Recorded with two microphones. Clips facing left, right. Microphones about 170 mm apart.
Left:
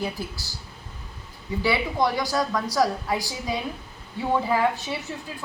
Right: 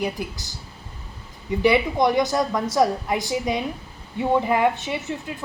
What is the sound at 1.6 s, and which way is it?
A woman's voice, 20° right (ahead or behind).